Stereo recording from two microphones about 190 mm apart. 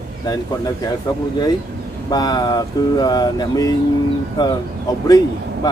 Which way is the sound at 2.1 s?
20° left (ahead or behind).